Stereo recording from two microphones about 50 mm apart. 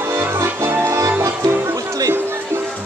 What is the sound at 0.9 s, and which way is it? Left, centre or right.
Music, right.